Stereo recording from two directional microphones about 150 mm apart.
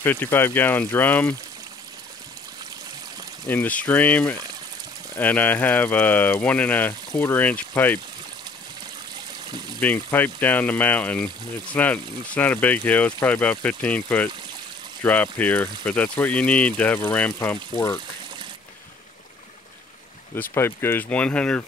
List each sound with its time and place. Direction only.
0.0 s speech: 15° left (ahead or behind)
3.4 s speech: 10° left (ahead or behind)
9.8 s speech: 10° left (ahead or behind)
20.3 s speech: 15° left (ahead or behind)